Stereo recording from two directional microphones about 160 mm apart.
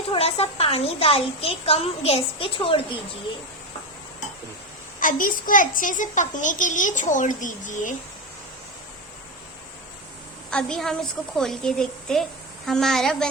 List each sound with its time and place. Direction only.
0.1 s a woman's voice: 40° left (ahead or behind)
4.9 s a child's voice: 55° left (ahead or behind)
10.5 s a woman's voice: 5° left (ahead or behind)